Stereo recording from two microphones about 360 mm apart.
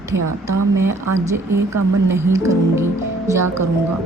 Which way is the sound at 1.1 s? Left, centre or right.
Centre.